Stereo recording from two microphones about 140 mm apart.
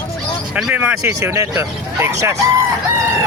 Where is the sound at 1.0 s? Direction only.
20° right (ahead or behind).